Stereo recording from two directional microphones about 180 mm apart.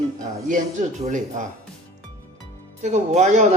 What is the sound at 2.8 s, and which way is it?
Speech, 40° right (ahead or behind).